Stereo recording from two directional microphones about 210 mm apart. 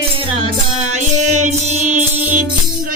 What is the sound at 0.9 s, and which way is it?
Music, 35° right (ahead or behind).